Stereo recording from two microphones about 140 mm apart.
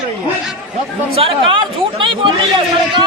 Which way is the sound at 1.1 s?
40° right (ahead or behind).